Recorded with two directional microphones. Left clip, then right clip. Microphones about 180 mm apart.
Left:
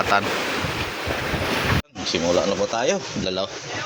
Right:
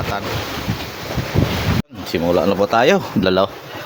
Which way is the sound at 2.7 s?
80° right.